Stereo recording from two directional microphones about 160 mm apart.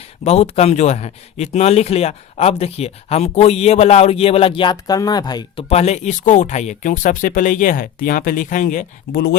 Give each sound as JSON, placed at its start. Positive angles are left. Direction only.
{"t": 0.3, "sound": "speech", "side_deg": 40}
{"t": 5.6, "sound": "speech", "side_deg": 40}